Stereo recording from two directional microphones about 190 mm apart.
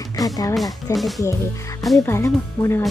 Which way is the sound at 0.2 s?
20° left (ahead or behind).